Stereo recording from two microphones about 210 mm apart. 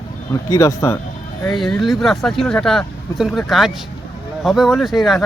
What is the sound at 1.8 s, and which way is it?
Speech, centre (ahead or behind).